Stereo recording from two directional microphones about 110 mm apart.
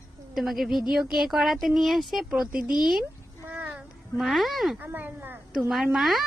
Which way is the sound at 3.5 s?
15° right (ahead or behind).